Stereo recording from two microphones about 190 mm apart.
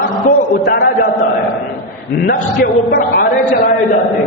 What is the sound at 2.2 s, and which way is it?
Speech, 50° left (ahead or behind).